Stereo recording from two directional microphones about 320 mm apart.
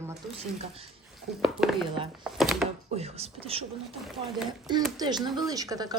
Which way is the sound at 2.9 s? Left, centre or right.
Centre.